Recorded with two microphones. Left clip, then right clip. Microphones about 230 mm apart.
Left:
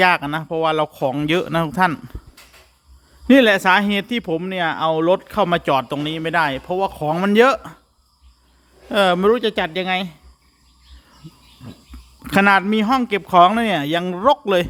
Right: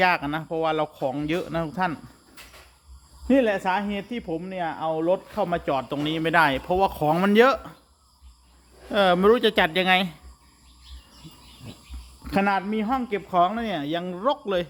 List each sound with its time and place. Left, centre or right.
0.0 s speech: left
3.2 s speech: left
6.0 s speech: centre
8.9 s speech: left
12.2 s a man's voice: left